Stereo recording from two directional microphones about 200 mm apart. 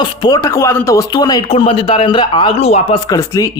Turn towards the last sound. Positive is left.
turn(degrees=15)  # may be behind; listen again after turning